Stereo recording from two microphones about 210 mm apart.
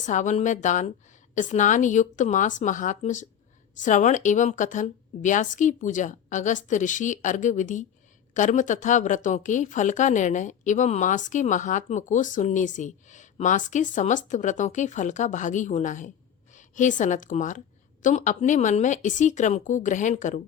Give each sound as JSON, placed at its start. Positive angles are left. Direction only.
{"t": 0.0, "sound": "a woman's voice", "side_deg": 35}